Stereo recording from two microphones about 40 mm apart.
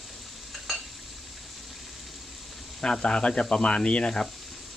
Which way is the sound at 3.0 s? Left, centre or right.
Left.